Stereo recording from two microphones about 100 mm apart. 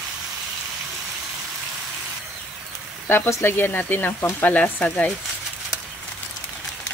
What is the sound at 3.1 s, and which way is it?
Speech, 25° left (ahead or behind).